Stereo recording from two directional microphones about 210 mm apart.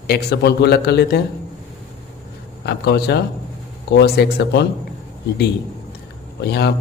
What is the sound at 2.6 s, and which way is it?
A man's voice, 50° left (ahead or behind).